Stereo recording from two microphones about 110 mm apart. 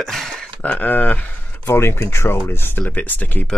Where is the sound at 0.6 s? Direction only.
15° left (ahead or behind).